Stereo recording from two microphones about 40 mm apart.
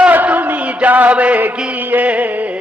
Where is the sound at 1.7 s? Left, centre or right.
Right.